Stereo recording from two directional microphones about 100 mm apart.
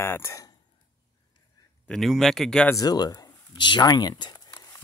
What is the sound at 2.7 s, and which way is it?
Speech, 40° left (ahead or behind).